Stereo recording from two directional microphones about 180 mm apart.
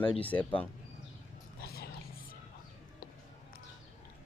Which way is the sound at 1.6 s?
60° left (ahead or behind).